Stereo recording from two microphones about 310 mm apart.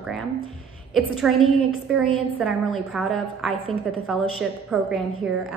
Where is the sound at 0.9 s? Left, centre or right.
Centre.